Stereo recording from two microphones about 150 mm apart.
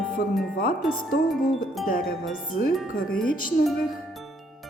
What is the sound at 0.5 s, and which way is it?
Speech, 75° left (ahead or behind).